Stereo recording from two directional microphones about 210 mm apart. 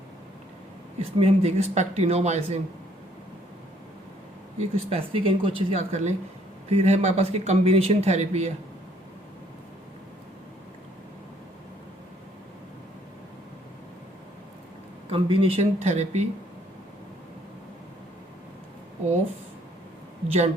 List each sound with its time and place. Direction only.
0.9 s speech: 30° right (ahead or behind)
4.7 s speech: 25° right (ahead or behind)
15.1 s speech: 25° right (ahead or behind)
20.2 s speech: 30° right (ahead or behind)